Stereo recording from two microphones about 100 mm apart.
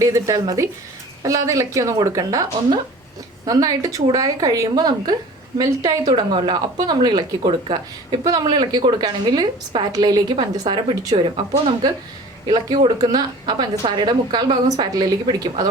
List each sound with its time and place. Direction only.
0.0 s a woman's voice: 35° right (ahead or behind)
12.5 s a woman's voice: 45° right (ahead or behind)
13.4 s speech: 50° right (ahead or behind)